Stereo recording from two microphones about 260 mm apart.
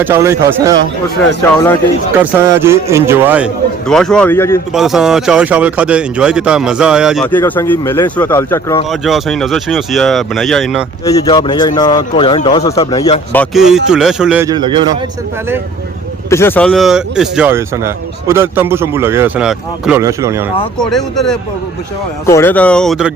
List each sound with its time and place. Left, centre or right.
0.0 s speech: centre
2.2 s speech: centre
4.7 s speech: centre
8.9 s speech: centre
11.0 s speech: centre
16.3 s speech: centre
20.7 s speech: centre